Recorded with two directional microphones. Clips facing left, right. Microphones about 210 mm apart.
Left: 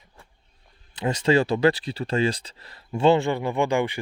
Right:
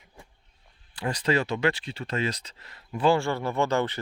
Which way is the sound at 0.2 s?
15° right (ahead or behind).